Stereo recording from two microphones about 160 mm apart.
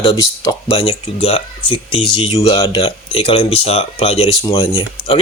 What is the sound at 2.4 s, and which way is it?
Speech, 25° left (ahead or behind).